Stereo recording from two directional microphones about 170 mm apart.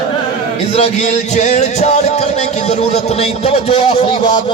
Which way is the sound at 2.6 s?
40° left (ahead or behind).